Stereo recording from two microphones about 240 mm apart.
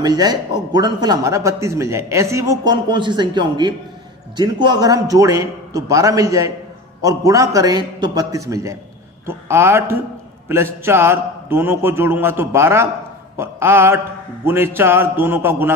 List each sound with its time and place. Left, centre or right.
0.0 s speech: centre